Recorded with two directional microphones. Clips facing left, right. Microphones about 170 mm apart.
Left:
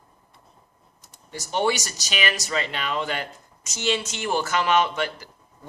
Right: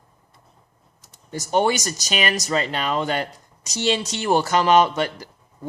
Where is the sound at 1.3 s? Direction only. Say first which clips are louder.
Right 4 dB; 45° right (ahead or behind).